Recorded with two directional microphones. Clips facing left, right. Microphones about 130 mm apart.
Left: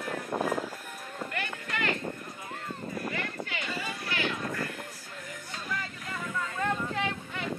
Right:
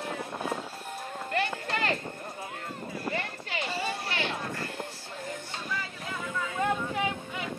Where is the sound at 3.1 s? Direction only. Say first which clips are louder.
Right 1 dB; 30° right (ahead or behind).